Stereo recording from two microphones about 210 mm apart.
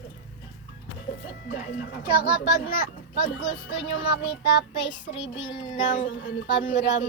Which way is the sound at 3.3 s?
65° left (ahead or behind).